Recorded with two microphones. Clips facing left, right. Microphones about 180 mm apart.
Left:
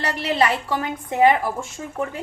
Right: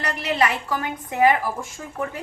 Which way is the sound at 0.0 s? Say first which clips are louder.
Left 2 dB; 30° left (ahead or behind).